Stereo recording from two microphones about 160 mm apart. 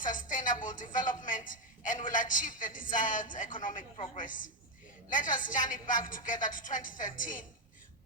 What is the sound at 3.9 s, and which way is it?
A woman's voice, 45° left (ahead or behind).